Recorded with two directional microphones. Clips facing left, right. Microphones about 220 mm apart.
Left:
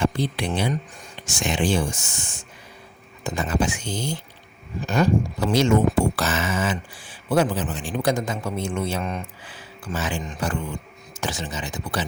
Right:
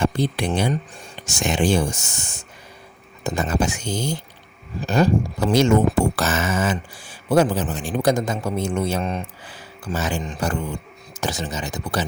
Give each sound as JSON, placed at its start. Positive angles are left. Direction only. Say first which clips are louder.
{"t": 0.0, "sound": "speech", "louder": "right 2 dB", "side_deg": -45}
{"t": 5.4, "sound": "speech", "louder": "right 3 dB", "side_deg": -45}